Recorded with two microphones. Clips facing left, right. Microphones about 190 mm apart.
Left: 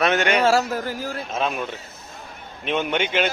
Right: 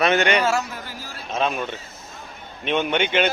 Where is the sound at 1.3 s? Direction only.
5° left (ahead or behind).